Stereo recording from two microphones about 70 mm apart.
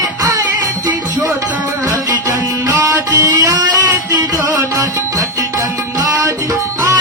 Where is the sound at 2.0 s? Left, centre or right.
Right.